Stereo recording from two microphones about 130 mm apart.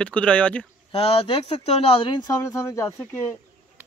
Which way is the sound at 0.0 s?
10° left (ahead or behind).